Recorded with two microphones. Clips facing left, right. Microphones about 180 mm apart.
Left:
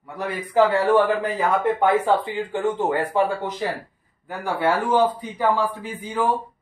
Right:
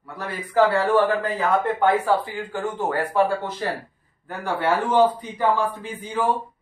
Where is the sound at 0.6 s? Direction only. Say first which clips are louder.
Left 1 dB; 15° left (ahead or behind).